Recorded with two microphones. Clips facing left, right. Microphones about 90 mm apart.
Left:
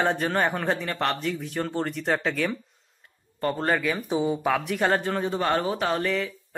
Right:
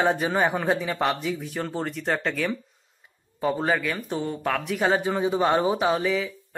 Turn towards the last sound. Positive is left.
turn(degrees=-5)  # may be behind; listen again after turning